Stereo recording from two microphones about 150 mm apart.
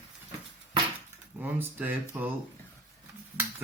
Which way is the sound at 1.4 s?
10° right (ahead or behind).